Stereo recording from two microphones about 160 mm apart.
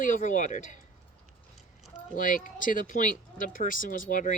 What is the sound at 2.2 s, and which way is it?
Speech, 55° left (ahead or behind).